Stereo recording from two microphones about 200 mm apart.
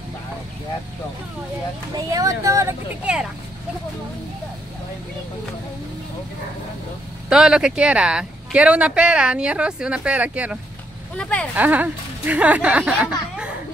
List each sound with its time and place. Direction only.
2.0 s speech: 15° right (ahead or behind)
7.2 s speech: 5° right (ahead or behind)
11.1 s speech: 5° left (ahead or behind)
11.5 s speech: 10° right (ahead or behind)